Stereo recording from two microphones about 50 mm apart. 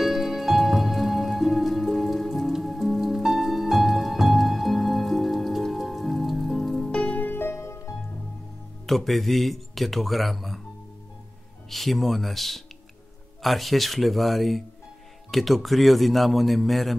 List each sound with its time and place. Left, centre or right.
0.0 s music: centre
6.9 s music: left
7.2 s music: left
7.5 s music: left
8.8 s speech: centre
11.7 s speech: centre